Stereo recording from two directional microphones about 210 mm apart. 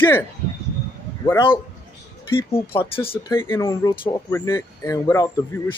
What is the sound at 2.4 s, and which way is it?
Speech, 25° left (ahead or behind).